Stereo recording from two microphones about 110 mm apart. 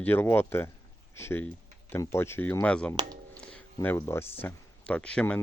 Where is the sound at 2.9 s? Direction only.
40° right (ahead or behind).